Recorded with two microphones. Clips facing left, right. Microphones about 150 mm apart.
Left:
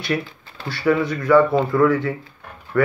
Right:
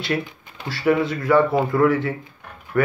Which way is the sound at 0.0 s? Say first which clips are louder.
Left 1 dB; 20° right (ahead or behind).